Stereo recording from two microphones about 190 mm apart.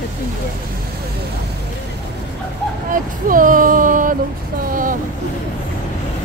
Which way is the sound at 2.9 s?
45° right (ahead or behind).